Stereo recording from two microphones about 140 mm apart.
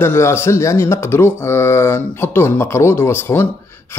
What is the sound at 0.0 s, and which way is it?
A man's voice, 15° left (ahead or behind).